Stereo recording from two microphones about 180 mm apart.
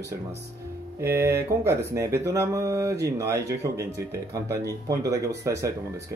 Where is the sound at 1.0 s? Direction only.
15° right (ahead or behind).